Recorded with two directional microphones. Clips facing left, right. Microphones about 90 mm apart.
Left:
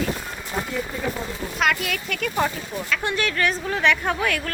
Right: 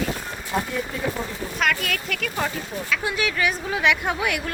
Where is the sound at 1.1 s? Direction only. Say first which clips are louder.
Even; 5° left (ahead or behind).